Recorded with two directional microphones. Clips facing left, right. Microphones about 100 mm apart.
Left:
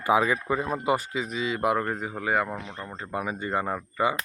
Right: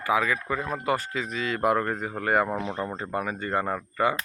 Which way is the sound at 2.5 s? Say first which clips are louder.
Right 7 dB; 25° right (ahead or behind).